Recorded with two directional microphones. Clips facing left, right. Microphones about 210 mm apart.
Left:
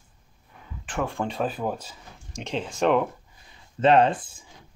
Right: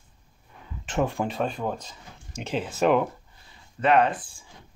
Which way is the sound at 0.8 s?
20° right (ahead or behind).